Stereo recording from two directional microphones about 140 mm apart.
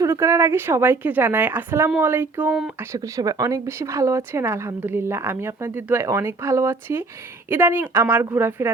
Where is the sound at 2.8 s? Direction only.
25° right (ahead or behind).